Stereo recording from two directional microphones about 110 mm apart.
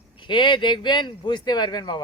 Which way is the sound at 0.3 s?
45° left (ahead or behind).